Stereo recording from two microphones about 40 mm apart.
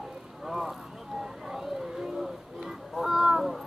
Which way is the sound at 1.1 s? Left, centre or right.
Centre.